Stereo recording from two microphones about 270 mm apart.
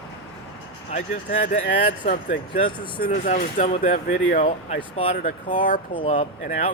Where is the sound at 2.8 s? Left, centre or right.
Centre.